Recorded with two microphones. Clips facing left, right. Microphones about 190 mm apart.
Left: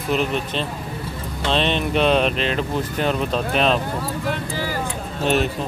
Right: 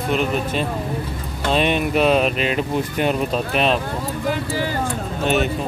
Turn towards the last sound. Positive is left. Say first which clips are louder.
# even
turn(degrees=0)  # may be behind; listen again after turning